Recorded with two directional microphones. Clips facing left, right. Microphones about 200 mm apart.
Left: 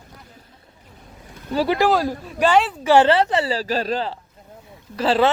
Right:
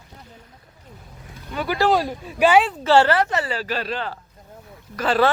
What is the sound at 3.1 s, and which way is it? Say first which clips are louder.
Speech: left 3 dB; 30° left (ahead or behind).